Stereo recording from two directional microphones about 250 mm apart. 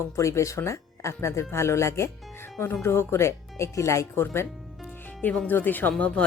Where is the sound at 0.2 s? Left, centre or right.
Centre.